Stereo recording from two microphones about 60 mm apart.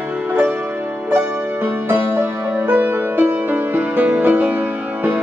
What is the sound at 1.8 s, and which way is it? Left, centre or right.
Music, right.